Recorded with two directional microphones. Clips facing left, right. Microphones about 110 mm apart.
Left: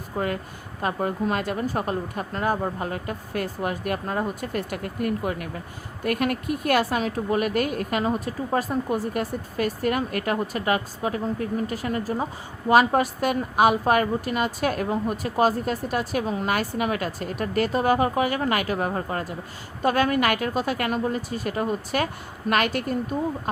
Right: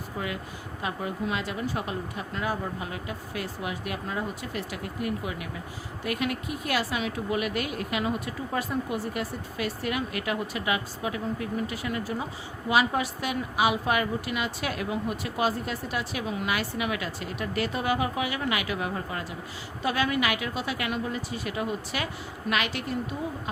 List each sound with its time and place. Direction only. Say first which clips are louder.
0.2 s speech: left 7 dB; 45° left (ahead or behind)